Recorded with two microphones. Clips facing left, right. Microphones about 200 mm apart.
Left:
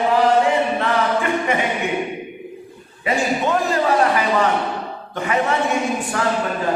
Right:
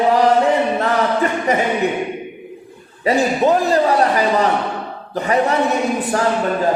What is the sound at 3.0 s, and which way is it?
A man's voice, 35° right (ahead or behind).